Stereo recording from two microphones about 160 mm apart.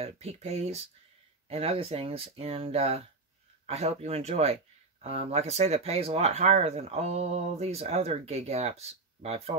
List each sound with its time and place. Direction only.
0.0 s speech: 40° right (ahead or behind)